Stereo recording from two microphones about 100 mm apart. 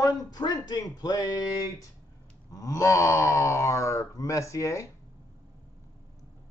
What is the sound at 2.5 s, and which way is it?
A man's voice, 30° left (ahead or behind).